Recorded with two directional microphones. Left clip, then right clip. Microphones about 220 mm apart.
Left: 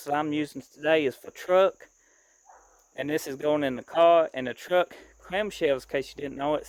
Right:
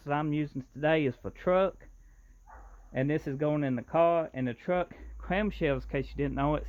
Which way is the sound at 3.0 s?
45° left (ahead or behind).